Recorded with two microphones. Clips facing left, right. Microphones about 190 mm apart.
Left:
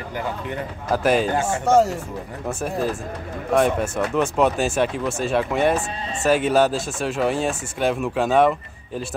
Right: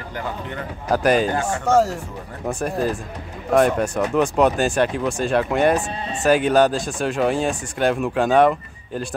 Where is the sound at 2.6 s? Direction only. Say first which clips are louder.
Right 1 dB; 5° left (ahead or behind).